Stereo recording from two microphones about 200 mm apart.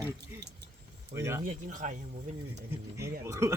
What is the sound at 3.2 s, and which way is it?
Speech, 15° right (ahead or behind).